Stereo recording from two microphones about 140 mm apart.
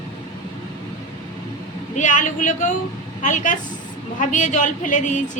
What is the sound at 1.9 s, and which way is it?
A woman's voice, 65° left (ahead or behind).